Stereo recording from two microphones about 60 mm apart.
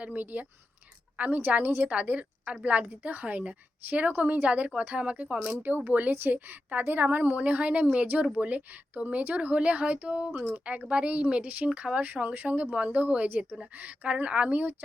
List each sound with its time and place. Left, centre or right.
0.0 s a woman's voice: right
5.5 s a woman's voice: right